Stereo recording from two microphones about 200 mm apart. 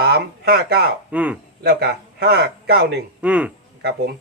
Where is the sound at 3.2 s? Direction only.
5° right (ahead or behind).